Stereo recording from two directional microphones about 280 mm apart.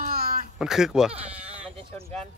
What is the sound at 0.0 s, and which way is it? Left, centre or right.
Cat, right.